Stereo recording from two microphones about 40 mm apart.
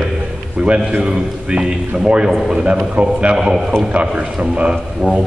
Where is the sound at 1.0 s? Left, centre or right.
Right.